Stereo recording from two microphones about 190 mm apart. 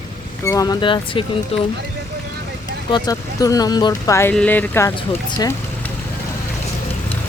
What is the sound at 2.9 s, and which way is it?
Speech, 20° left (ahead or behind).